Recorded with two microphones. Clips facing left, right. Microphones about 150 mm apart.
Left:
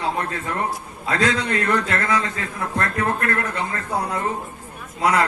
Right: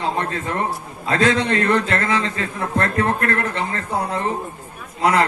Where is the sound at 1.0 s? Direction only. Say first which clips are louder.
Right 3 dB; 30° right (ahead or behind).